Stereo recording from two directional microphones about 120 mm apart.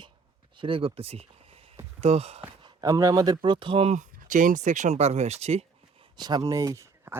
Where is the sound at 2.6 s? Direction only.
40° right (ahead or behind).